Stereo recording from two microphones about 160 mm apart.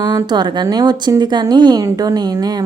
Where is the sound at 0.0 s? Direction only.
25° right (ahead or behind).